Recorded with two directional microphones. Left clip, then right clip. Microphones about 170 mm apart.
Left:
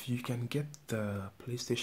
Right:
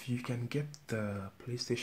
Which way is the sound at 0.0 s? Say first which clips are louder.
Left 1 dB; 10° left (ahead or behind).